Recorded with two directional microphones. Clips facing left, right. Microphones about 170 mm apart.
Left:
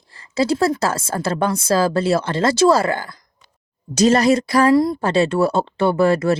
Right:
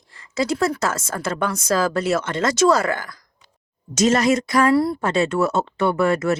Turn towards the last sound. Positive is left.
turn(degrees=30)  # may be behind; listen again after turning